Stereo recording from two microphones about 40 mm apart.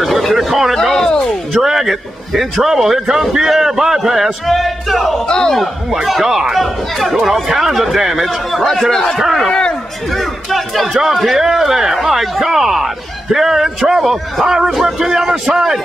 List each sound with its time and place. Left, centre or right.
0.2 s a sound: centre
0.7 s speech: centre
1.5 s speech: centre
5.3 s a man's voice: centre
6.2 s speech: centre
8.9 s a man's voice: centre
9.5 s speech: left
10.1 s speech: centre